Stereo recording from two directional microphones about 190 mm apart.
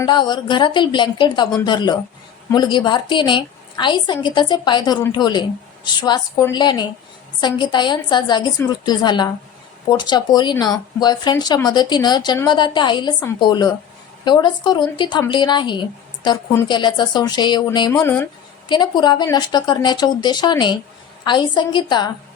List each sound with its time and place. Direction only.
0.0 s a woman's voice: 25° left (ahead or behind)
18.0 s speech: 10° left (ahead or behind)
18.7 s a woman's voice: 25° left (ahead or behind)